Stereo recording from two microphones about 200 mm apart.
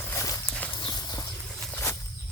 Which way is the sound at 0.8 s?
20° left (ahead or behind).